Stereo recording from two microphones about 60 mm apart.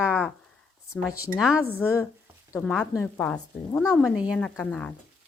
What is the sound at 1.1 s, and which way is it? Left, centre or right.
Speech, left.